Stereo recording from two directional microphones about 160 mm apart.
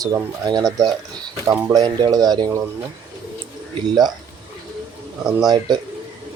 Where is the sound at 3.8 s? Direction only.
25° right (ahead or behind).